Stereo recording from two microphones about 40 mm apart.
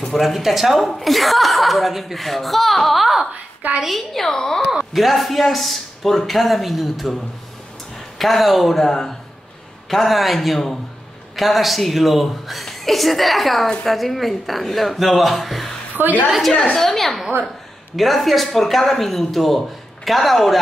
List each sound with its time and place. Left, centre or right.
0.2 s a woman's voice: centre
4.6 s a woman's voice: centre
8.2 s a woman's voice: centre
16.0 s a woman's voice: right
16.7 s a woman's voice: centre